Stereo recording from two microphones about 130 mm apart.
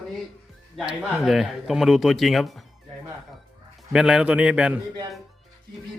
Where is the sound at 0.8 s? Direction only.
5° right (ahead or behind).